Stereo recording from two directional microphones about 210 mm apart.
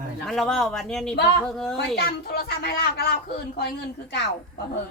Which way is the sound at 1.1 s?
50° left (ahead or behind).